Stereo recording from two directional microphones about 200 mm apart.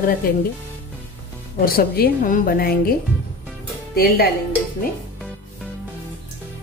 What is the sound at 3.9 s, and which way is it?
Speech, 50° left (ahead or behind).